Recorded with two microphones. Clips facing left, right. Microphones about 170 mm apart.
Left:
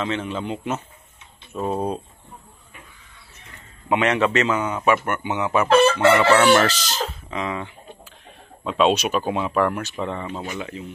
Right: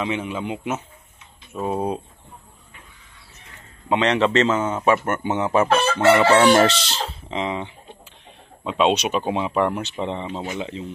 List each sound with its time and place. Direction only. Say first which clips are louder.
0.0 s speech: even; 10° right (ahead or behind)
3.9 s speech: right 1 dB; 20° right (ahead or behind); by 5.3 s 40° right (ahead or behind)
5.3 s speech: left 1 dB; 30° right (ahead or behind)
7.1 s a sound: right 2 dB; 25° right (ahead or behind)
8.6 s speech: even; 15° right (ahead or behind)